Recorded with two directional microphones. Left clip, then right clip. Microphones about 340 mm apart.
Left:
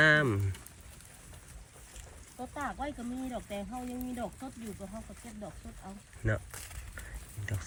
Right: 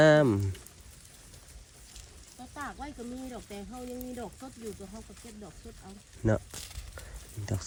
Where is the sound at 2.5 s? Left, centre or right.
Centre.